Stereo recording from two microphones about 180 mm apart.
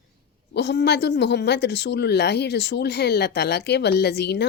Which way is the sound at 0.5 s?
70° left (ahead or behind).